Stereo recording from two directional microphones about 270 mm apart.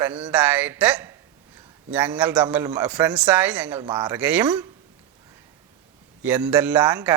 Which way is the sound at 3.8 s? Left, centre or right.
Centre.